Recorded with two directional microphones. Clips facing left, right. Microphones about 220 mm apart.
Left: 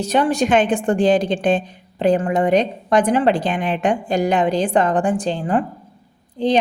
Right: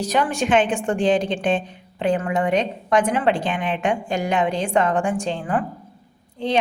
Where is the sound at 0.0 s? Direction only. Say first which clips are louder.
Left 4 dB; 30° left (ahead or behind).